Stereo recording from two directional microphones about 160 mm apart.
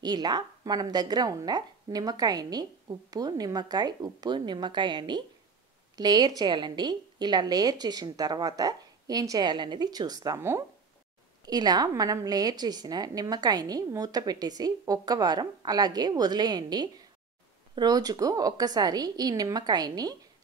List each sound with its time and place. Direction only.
0.0 s a woman's voice: 25° right (ahead or behind)